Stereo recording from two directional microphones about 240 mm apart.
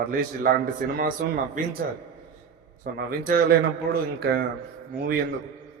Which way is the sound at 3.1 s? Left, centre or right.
Right.